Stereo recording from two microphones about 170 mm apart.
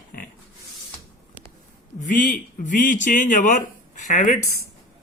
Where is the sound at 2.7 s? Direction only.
50° left (ahead or behind).